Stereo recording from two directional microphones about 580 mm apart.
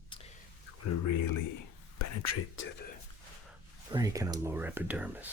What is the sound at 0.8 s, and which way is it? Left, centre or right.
Speech, left.